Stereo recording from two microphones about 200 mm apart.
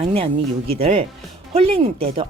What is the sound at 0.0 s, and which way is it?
Speech, 30° right (ahead or behind).